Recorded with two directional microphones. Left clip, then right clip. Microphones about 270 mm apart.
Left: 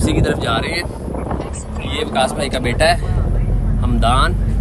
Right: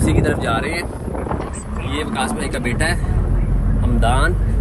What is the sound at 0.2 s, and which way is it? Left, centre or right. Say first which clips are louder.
Speech: left 1 dB; centre.